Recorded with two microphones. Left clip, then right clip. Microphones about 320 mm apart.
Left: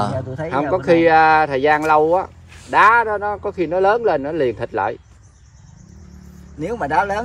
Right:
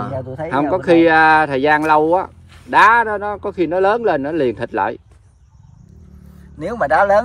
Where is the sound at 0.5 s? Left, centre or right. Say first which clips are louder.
Right 2 dB; right.